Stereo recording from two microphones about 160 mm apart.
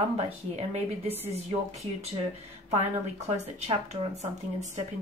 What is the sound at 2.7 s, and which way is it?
Speech, 40° right (ahead or behind).